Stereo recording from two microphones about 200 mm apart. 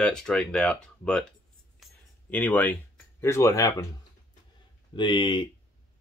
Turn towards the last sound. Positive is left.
turn(degrees=25)  # may be behind; listen again after turning